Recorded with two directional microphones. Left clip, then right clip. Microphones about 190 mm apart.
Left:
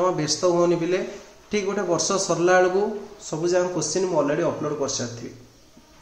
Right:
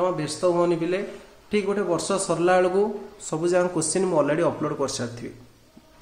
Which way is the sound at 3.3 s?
40° right (ahead or behind).